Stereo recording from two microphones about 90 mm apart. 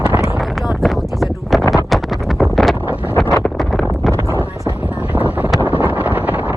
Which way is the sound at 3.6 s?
Centre (ahead or behind).